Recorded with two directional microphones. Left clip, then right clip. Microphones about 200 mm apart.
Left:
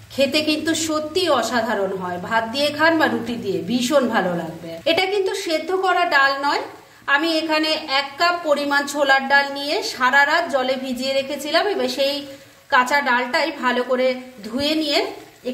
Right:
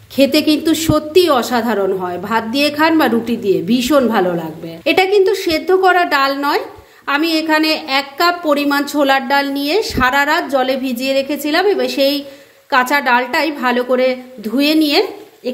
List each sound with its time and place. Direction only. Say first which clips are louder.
0.2 s a woman's voice: right 6 dB; 35° right (ahead or behind)